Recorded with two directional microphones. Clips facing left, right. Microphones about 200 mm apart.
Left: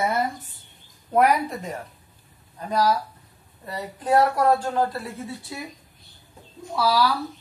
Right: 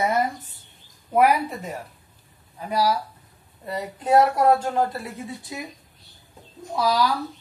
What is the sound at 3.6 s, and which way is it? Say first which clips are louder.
A woman's voice: right 2 dB; 25° right (ahead or behind).